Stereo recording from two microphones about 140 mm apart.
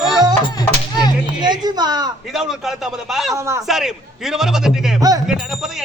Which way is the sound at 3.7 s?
5° right (ahead or behind).